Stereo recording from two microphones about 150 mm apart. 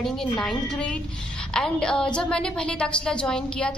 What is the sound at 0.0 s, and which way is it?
A woman's voice, 5° left (ahead or behind).